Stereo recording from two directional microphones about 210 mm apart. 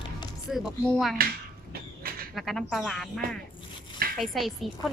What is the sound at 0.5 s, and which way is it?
Speech, centre (ahead or behind).